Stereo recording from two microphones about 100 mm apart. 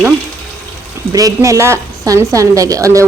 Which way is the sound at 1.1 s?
35° right (ahead or behind).